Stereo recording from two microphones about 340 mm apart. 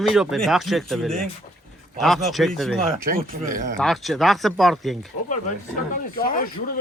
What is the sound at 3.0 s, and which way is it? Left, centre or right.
Speech, right.